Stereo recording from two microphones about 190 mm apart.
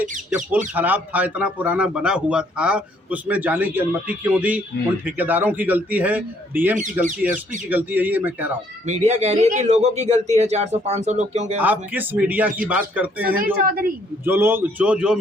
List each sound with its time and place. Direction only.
0.7 s a man's voice: 10° right (ahead or behind)
8.9 s a man's voice: 35° right (ahead or behind)
11.6 s a man's voice: 10° right (ahead or behind)
13.4 s a woman's voice: 50° right (ahead or behind)
14.3 s a man's voice: 10° right (ahead or behind)